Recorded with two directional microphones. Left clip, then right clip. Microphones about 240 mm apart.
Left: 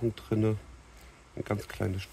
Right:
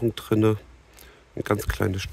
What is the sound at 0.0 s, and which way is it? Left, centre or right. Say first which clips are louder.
Speech: right 8 dB; right.